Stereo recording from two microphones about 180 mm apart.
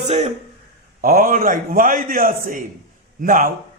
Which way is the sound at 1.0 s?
50° right (ahead or behind).